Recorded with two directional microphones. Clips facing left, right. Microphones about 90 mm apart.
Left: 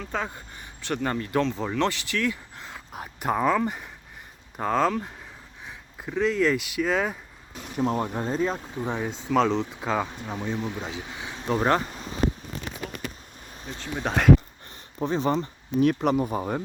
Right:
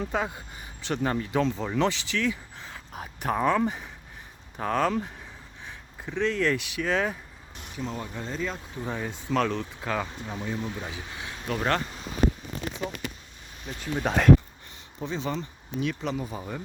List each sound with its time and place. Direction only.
0.1 s speech: 5° right (ahead or behind)
2.6 s a sound: 15° left (ahead or behind)
3.0 s speech: 5° left (ahead or behind)
4.5 s speech: 15° left (ahead or behind)
7.8 s speech: 55° left (ahead or behind); by 8.5 s 40° left (ahead or behind)
8.7 s speech: 15° left (ahead or behind)
14.0 s speech: centre (ahead or behind)
14.9 s speech: 45° left (ahead or behind)